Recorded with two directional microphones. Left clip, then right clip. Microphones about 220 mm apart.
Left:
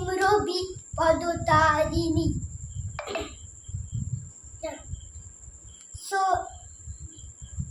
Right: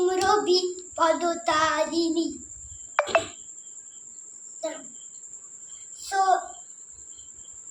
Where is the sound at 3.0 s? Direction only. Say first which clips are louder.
Right 11 dB; 40° right (ahead or behind).